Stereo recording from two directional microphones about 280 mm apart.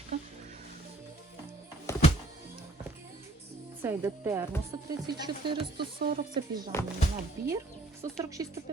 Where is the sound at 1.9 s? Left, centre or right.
Centre.